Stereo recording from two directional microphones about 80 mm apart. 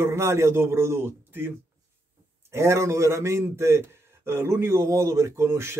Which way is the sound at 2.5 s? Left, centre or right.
Right.